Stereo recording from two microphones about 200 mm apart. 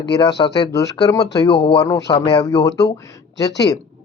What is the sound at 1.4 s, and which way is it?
Speech, 55° left (ahead or behind).